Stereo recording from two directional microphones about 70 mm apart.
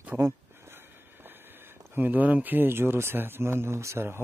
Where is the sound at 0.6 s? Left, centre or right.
Right.